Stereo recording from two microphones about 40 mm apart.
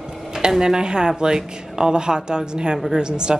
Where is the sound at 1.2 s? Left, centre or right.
Centre.